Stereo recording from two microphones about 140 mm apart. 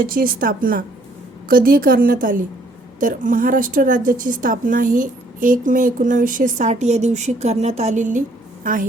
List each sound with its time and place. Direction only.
0.0 s a woman's voice: 90° right; by 8.2 s 60° right (ahead or behind)
8.6 s a woman's voice: 75° right (ahead or behind)